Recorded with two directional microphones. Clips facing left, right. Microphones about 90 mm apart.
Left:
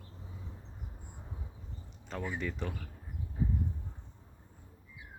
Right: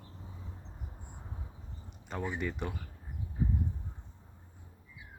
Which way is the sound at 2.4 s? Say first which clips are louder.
Right 1 dB; 10° right (ahead or behind).